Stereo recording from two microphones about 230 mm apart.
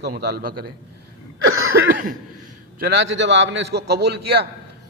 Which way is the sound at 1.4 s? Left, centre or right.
Right.